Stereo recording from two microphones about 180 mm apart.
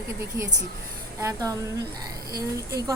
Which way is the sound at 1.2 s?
20° right (ahead or behind).